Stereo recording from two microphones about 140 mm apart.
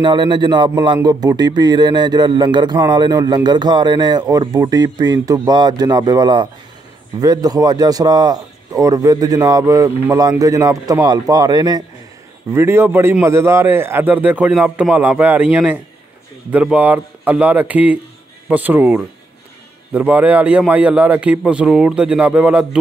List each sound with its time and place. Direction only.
0.0 s a man's voice: 35° right (ahead or behind)
12.5 s a man's voice: 15° right (ahead or behind)